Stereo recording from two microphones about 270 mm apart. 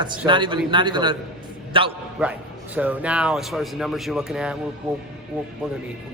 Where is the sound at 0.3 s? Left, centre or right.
Centre.